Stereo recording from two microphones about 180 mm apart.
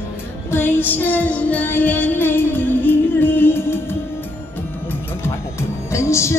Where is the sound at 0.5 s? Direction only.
10° left (ahead or behind).